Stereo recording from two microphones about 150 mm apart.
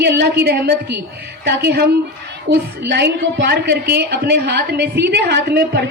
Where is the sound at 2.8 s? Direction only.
90° right.